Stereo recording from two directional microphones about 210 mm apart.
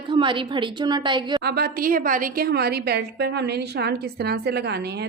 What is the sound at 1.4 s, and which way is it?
A woman's voice, 50° right (ahead or behind).